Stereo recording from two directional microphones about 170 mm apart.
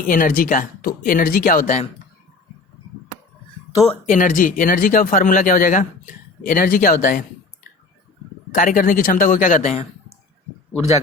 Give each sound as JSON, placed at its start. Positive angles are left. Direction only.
{"t": 0.0, "sound": "speech", "side_deg": 50}
{"t": 4.1, "sound": "speech", "side_deg": 50}
{"t": 8.5, "sound": "speech", "side_deg": 50}